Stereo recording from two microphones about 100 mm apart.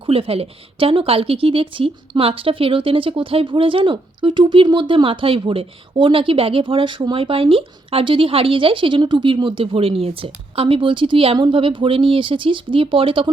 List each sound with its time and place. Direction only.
0.0 s speech: 70° right (ahead or behind)